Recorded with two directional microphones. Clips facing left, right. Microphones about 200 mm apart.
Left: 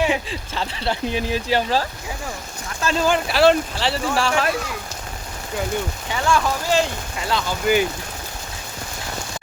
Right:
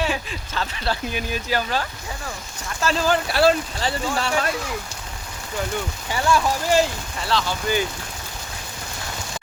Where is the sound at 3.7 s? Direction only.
80° left.